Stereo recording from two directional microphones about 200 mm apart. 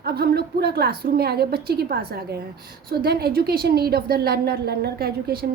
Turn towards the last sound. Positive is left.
turn(degrees=-50)  # may be behind; listen again after turning